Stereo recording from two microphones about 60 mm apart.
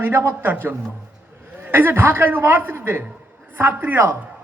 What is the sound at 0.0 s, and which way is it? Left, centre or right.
Speech, right.